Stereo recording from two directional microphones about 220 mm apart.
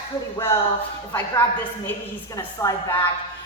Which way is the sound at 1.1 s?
10° left (ahead or behind).